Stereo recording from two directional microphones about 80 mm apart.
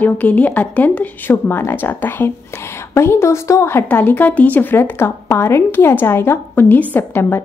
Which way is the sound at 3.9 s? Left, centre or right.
Left.